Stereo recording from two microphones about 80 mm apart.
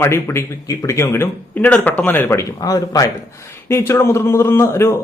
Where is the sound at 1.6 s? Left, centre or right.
Centre.